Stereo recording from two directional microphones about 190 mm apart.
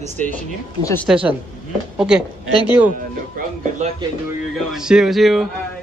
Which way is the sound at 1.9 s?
5° right (ahead or behind).